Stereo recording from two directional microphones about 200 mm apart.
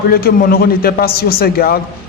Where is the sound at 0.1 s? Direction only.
50° left (ahead or behind).